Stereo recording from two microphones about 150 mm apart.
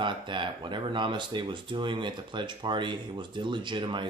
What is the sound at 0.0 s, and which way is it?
Speech, 30° right (ahead or behind).